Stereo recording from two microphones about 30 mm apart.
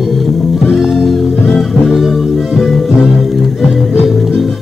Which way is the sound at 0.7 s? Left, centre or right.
Centre.